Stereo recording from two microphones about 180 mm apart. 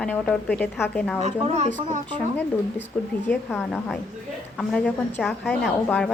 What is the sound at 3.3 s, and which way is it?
A woman's voice, 5° left (ahead or behind).